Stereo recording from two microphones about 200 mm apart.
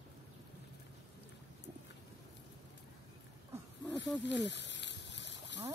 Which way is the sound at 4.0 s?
60° left (ahead or behind).